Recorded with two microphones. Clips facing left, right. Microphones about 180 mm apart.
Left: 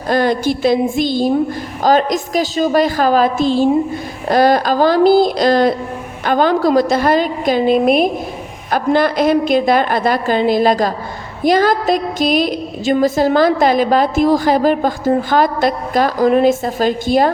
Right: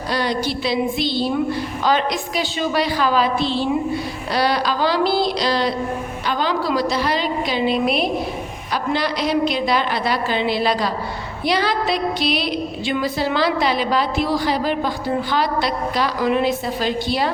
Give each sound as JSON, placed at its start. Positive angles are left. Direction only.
{"t": 0.1, "sound": "a woman's voice", "side_deg": 50}